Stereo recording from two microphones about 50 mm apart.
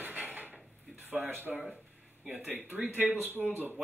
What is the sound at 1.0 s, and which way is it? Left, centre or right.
Speech, right.